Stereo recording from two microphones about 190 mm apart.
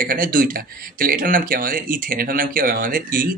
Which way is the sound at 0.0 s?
50° right (ahead or behind).